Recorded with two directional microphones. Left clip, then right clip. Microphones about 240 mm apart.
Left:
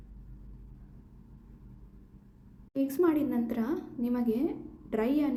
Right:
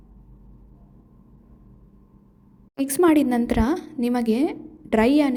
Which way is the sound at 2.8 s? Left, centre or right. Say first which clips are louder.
Right 9 dB; right.